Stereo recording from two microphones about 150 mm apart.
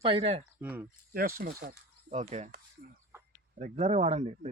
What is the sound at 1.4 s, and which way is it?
Speech, 90° right.